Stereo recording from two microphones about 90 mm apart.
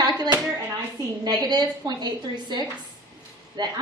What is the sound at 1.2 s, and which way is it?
A woman's voice, 50° right (ahead or behind).